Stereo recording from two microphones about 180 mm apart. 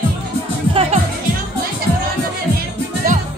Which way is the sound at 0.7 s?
30° right (ahead or behind).